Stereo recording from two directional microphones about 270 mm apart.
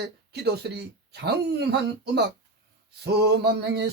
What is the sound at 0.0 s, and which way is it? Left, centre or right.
Speech, right.